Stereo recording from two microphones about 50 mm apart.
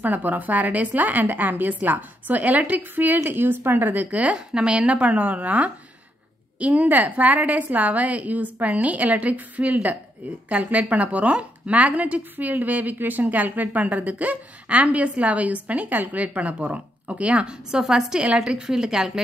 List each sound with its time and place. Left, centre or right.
0.0 s a woman's voice: right
4.4 s a woman's voice: centre